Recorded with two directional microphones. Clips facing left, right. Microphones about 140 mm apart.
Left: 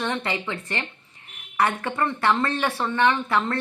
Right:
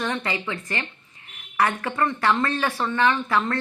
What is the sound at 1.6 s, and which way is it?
A woman's voice, 25° left (ahead or behind).